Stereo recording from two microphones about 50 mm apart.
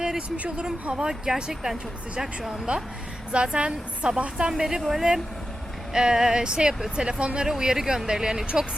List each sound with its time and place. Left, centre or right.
0.2 s speech: right; by 2.5 s centre
2.5 s a woman's voice: right